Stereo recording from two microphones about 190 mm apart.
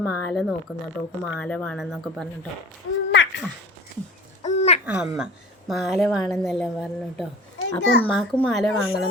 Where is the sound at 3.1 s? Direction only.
65° left (ahead or behind).